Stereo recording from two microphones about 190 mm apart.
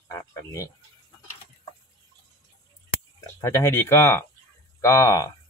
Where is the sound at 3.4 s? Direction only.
15° left (ahead or behind).